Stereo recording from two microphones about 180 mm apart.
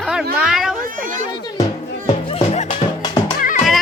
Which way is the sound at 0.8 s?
45° right (ahead or behind).